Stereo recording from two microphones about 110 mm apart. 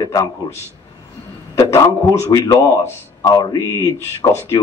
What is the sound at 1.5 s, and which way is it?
A man's voice, 30° left (ahead or behind).